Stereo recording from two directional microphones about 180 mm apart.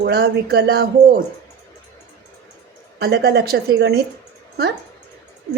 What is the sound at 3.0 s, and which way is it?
A woman's voice, 65° right (ahead or behind).